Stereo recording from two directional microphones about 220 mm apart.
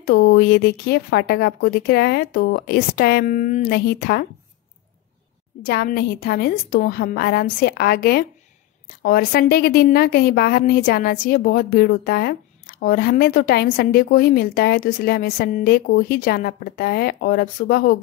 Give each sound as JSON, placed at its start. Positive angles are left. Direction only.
{"t": 0.0, "sound": "a woman's voice", "side_deg": 45}
{"t": 5.6, "sound": "a woman's voice", "side_deg": 45}